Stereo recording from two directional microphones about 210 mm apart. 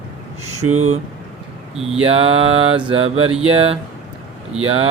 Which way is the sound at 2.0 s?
30° right (ahead or behind).